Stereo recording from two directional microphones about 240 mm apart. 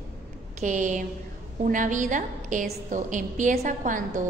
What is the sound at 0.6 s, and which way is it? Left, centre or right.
A woman's voice, right.